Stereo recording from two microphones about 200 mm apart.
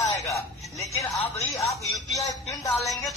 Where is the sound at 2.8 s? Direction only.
Centre (ahead or behind).